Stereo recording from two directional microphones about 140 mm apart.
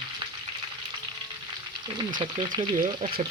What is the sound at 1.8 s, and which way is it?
Speech, 35° right (ahead or behind).